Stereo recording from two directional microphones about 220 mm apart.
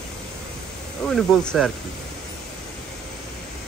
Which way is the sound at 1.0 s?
5° left (ahead or behind).